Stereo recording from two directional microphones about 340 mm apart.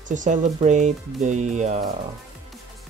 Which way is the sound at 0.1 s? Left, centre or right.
Right.